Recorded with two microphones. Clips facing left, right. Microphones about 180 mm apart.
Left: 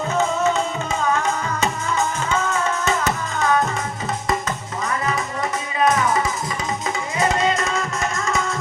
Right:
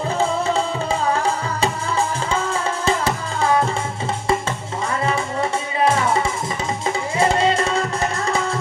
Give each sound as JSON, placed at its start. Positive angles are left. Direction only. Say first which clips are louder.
{"t": 0.1, "sound": "tabla", "louder": "left 1 dB", "side_deg": -30}
{"t": 4.9, "sound": "music", "louder": "right 2 dB", "side_deg": -30}